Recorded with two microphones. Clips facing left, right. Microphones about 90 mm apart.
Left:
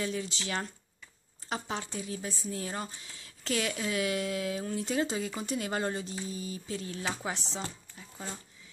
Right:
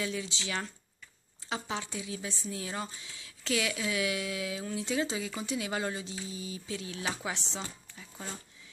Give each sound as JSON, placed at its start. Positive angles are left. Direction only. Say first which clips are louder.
{"t": 0.0, "sound": "speech", "louder": "left 1 dB", "side_deg": 45}
{"t": 7.1, "sound": "speech", "louder": "even", "side_deg": -5}